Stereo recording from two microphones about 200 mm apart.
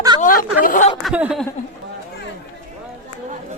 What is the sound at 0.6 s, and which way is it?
Speech, 40° left (ahead or behind).